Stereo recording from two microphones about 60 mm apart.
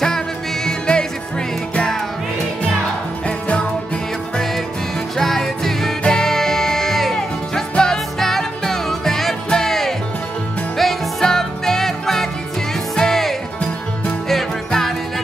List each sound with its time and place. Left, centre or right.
0.7 s music: centre
3.3 s music: centre
5.1 s music: centre